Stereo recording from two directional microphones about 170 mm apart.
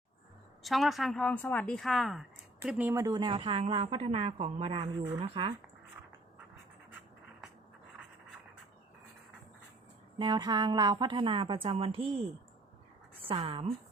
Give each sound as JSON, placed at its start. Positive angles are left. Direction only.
{"t": 0.6, "sound": "speech", "side_deg": 0}
{"t": 10.2, "sound": "a woman's voice", "side_deg": -25}
{"t": 13.2, "sound": "speech", "side_deg": -30}